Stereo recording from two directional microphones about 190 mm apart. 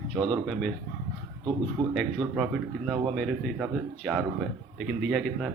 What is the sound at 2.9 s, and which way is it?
Speech, centre (ahead or behind).